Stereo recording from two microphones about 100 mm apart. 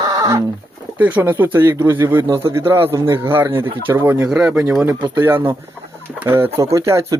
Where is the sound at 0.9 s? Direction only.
15° right (ahead or behind).